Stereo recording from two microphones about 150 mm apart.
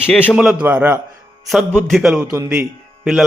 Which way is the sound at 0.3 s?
10° right (ahead or behind).